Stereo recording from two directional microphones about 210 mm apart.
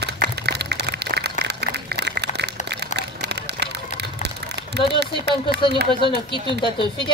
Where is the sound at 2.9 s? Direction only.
55° right (ahead or behind).